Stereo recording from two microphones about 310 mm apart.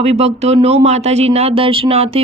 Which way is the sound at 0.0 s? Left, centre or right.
Right.